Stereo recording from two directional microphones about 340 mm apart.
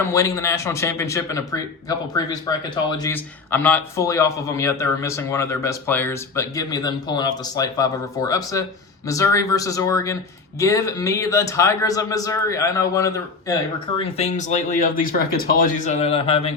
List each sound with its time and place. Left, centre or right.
0.0 s a man's voice: centre